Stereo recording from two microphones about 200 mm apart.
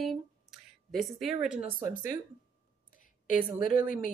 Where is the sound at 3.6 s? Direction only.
45° left (ahead or behind).